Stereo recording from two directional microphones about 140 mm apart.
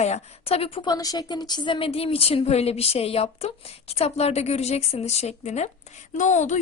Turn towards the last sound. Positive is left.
turn(degrees=60)  # may be behind; listen again after turning